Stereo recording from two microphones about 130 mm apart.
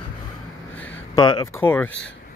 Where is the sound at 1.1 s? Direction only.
30° left (ahead or behind).